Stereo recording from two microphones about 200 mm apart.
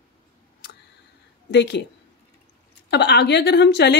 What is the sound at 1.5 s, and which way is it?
Speech, 60° left (ahead or behind).